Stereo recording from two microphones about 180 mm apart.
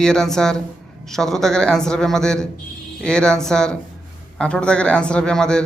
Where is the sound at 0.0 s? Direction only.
5° left (ahead or behind).